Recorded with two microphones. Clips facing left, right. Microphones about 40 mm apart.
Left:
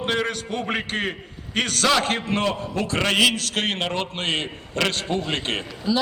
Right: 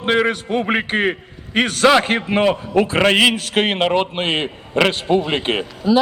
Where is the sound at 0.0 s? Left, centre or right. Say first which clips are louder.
Right 7 dB; right.